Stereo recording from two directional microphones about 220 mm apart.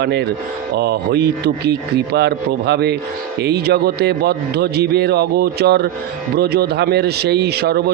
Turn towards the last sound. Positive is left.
turn(degrees=-45)  # may be behind; listen again after turning